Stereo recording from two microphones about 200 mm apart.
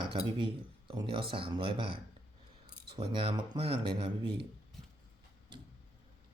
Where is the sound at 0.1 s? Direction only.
25° right (ahead or behind).